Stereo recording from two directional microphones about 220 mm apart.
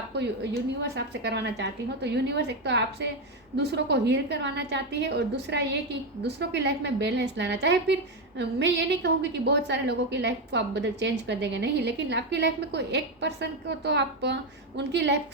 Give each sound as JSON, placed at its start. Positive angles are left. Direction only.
{"t": 0.1, "sound": "a woman's voice", "side_deg": -50}